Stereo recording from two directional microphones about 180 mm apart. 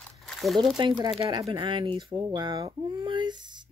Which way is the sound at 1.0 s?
25° right (ahead or behind).